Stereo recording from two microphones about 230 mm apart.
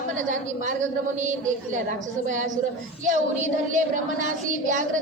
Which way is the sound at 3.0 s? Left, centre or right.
Right.